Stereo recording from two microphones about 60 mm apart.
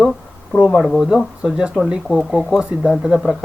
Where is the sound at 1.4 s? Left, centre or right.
Centre.